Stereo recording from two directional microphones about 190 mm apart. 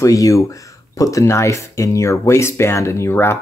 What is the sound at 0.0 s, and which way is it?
Speech, 15° left (ahead or behind).